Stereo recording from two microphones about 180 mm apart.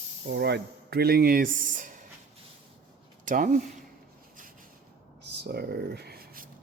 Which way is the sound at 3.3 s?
50° right (ahead or behind).